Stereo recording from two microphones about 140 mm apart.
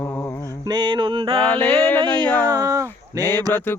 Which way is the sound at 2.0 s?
35° right (ahead or behind).